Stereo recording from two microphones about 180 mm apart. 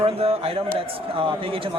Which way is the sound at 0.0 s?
35° right (ahead or behind).